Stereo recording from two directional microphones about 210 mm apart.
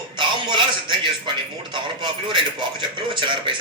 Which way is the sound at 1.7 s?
20° right (ahead or behind).